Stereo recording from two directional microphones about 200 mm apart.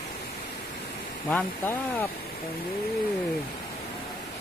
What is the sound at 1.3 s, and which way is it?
Speech, 10° left (ahead or behind).